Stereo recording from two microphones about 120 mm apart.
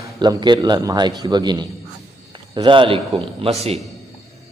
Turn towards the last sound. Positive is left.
turn(degrees=-55)  # may be behind; listen again after turning